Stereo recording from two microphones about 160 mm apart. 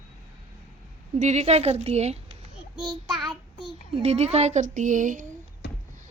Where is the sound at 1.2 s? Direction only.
45° right (ahead or behind).